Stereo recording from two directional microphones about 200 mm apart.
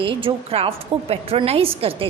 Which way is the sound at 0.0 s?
25° right (ahead or behind).